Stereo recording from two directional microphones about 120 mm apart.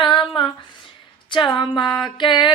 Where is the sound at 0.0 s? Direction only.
40° left (ahead or behind).